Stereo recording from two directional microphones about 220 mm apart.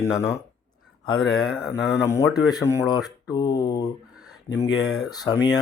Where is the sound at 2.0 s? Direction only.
10° left (ahead or behind).